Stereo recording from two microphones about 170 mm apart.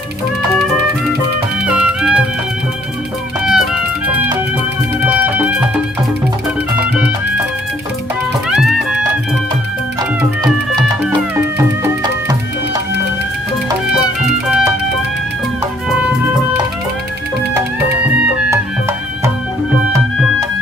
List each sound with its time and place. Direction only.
1.6 s music: 5° right (ahead or behind)
3.4 s music: 5° right (ahead or behind)
8.4 s music: 5° right (ahead or behind)
13.8 s music: 5° right (ahead or behind)
18.5 s music: 15° right (ahead or behind)